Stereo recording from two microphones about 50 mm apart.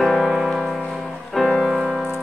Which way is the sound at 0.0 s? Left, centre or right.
Centre.